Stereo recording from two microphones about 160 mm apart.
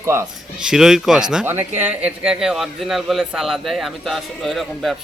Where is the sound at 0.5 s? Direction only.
5° right (ahead or behind).